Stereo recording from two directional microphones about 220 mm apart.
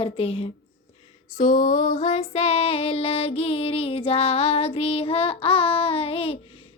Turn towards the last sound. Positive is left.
turn(degrees=25)  # may be behind; listen again after turning